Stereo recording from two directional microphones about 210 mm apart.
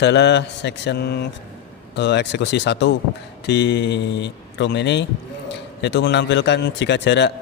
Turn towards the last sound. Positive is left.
turn(degrees=55)  # may be behind; listen again after turning